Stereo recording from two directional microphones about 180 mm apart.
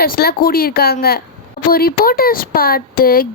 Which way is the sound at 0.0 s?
60° left (ahead or behind).